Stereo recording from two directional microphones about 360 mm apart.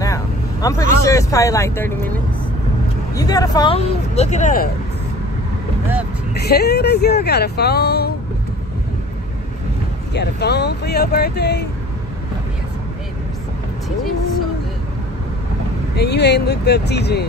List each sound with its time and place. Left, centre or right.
0.0 s vehicle: centre
1.0 s speech: centre
3.2 s speech: centre
6.3 s speech: left
10.1 s speech: left
16.0 s speech: left